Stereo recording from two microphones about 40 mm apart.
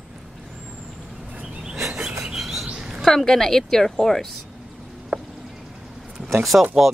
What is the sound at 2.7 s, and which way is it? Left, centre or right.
Chirp, centre.